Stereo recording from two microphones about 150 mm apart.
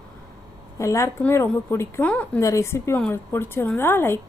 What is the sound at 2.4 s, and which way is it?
A woman's voice, 20° left (ahead or behind).